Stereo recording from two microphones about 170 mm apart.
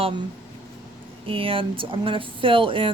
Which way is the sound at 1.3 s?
30° right (ahead or behind).